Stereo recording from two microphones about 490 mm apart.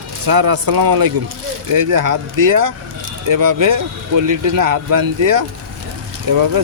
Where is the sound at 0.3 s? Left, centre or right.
Right.